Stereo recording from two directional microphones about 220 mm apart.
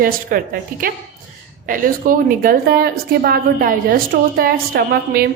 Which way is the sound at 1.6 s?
40° right (ahead or behind).